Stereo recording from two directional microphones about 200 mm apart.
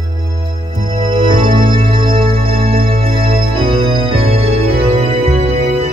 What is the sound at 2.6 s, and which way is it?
Music, 50° right (ahead or behind).